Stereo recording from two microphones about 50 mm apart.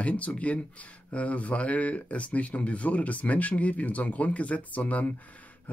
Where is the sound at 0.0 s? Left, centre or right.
Left.